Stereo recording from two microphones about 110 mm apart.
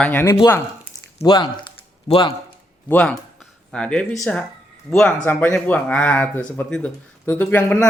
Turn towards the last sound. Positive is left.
turn(degrees=15)  # may be behind; listen again after turning